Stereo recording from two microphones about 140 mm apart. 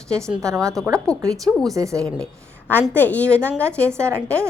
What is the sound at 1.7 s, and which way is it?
Speech, 25° right (ahead or behind).